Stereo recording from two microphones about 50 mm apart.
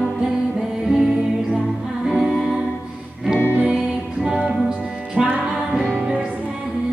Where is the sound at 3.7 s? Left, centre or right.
Centre.